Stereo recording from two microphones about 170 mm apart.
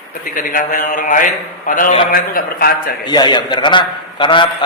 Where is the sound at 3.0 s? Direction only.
25° left (ahead or behind).